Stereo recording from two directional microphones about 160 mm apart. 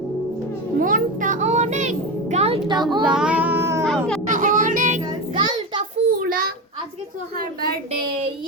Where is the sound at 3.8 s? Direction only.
5° left (ahead or behind).